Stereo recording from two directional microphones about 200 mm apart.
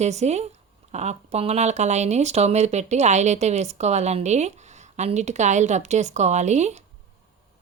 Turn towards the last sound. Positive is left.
turn(degrees=-35)  # may be behind; listen again after turning